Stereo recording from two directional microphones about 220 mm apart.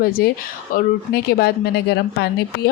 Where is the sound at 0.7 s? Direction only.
45° left (ahead or behind).